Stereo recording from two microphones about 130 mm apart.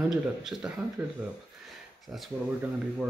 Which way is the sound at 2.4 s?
10° right (ahead or behind).